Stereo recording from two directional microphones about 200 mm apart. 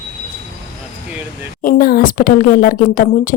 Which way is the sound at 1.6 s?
45° left (ahead or behind).